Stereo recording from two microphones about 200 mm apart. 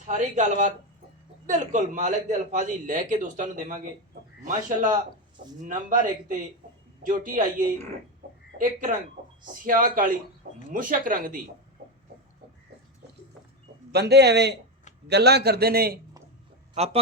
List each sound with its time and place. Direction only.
0.1 s a man's voice: 40° right (ahead or behind)
8.2 s a sound: 50° right (ahead or behind)
8.5 s a man's voice: 45° right (ahead or behind)
13.9 s a man's voice: 55° right (ahead or behind)
16.7 s speech: 30° right (ahead or behind)